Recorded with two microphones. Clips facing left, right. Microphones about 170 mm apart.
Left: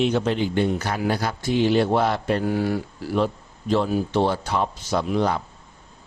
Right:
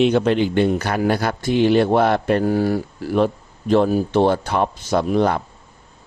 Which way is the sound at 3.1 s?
55° right (ahead or behind).